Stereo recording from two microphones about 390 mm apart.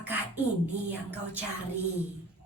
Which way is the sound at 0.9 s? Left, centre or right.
Centre.